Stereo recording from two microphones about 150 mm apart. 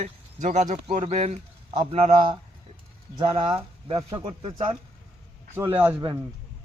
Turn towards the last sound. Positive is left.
turn(degrees=-15)  # may be behind; listen again after turning